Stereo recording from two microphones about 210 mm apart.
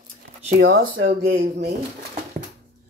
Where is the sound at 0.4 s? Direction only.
45° right (ahead or behind).